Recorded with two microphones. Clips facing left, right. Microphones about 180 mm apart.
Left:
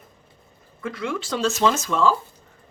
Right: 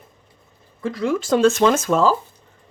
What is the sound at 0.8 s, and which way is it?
Speech, 35° right (ahead or behind).